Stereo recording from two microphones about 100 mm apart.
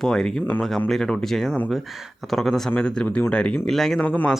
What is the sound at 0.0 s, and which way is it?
Speech, 5° left (ahead or behind).